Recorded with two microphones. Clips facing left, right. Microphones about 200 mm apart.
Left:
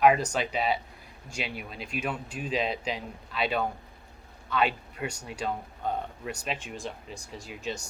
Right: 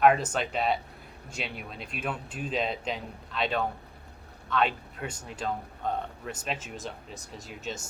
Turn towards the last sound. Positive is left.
turn(degrees=0)  # may be behind; listen again after turning